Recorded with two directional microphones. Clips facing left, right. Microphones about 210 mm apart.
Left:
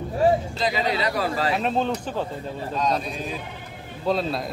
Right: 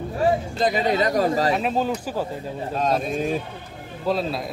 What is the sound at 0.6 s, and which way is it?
Speech, 50° right (ahead or behind).